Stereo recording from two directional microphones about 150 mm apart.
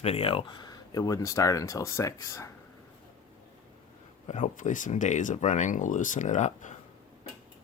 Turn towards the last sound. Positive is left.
turn(degrees=55)  # may be behind; listen again after turning